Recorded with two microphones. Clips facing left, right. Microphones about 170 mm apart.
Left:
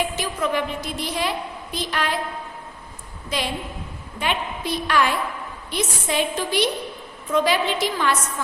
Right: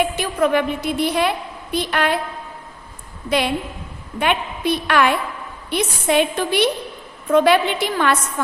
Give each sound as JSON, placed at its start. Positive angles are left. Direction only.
{"t": 0.2, "sound": "a woman's voice", "side_deg": -60}
{"t": 3.2, "sound": "a woman's voice", "side_deg": -60}